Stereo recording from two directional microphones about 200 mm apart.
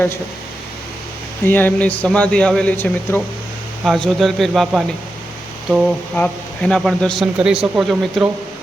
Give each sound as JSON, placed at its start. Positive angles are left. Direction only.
{"t": 1.5, "sound": "speech", "side_deg": 10}